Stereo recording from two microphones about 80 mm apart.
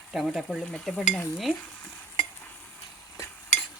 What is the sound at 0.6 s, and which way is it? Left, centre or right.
Stir, centre.